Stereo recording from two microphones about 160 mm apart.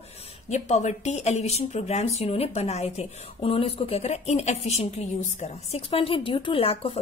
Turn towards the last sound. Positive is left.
turn(degrees=35)  # may be behind; listen again after turning